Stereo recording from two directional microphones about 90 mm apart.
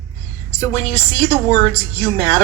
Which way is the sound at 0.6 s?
35° left (ahead or behind).